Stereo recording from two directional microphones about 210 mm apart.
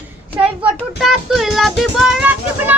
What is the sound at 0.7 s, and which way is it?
Child singing, centre (ahead or behind).